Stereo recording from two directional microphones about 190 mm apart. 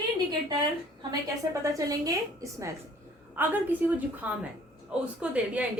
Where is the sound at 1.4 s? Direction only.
15° right (ahead or behind).